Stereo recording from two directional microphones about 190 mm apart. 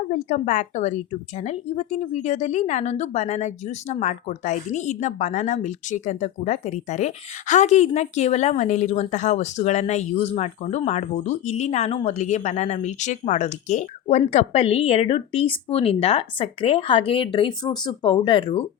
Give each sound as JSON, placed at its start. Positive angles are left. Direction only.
{"t": 0.1, "sound": "speech", "side_deg": 40}